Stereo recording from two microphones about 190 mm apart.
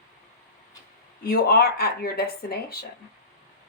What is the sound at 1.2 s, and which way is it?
Speech, 55° left (ahead or behind).